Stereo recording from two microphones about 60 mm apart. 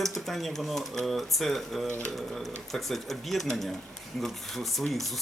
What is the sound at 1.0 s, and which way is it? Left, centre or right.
Speech, centre.